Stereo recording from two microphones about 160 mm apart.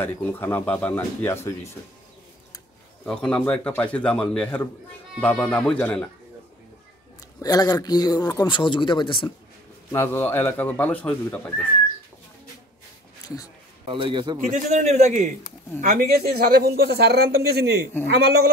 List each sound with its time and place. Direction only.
0.0 s speech: 15° left (ahead or behind)
3.1 s speech: 5° left (ahead or behind)
7.3 s speech: 25° left (ahead or behind)
9.9 s speech: 15° left (ahead or behind)
13.2 s a sound: 20° left (ahead or behind)
13.8 s speech: 35° right (ahead or behind)
14.5 s a man's voice: 50° right (ahead or behind)
15.8 s speech: 60° right (ahead or behind); by 17.7 s 80° right
18.1 s speech: 90° right